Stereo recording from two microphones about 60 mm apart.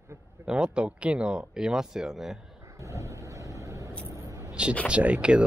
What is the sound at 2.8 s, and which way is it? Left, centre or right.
Vehicle, right.